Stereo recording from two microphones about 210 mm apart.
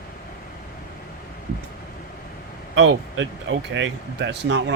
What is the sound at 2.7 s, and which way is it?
Speech, 60° right (ahead or behind).